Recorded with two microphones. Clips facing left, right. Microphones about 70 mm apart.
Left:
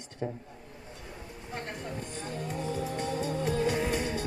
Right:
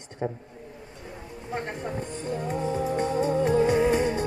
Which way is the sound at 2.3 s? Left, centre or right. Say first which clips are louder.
Right 7 dB; right.